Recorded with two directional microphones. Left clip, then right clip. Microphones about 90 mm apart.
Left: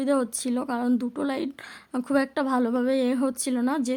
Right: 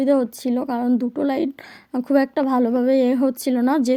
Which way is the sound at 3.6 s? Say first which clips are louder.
Right 8 dB; 50° right (ahead or behind).